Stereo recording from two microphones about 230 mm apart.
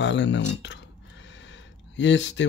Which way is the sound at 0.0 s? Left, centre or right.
Left.